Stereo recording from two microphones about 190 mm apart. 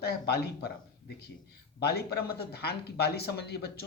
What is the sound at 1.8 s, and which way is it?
Speech, 55° left (ahead or behind).